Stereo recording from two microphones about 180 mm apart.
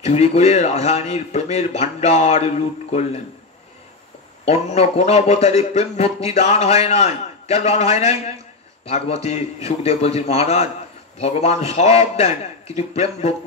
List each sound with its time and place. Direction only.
0.0 s a man's voice: 35° left (ahead or behind)
4.5 s a man's voice: 35° left (ahead or behind)